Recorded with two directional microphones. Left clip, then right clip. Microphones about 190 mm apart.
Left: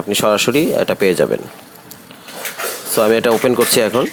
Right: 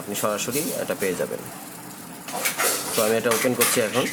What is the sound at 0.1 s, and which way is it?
Speech, 45° left (ahead or behind).